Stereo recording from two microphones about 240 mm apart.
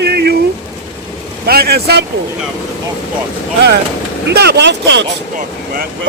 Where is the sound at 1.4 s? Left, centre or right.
Right.